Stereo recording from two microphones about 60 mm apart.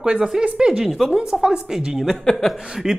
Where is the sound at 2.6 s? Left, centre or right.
Centre.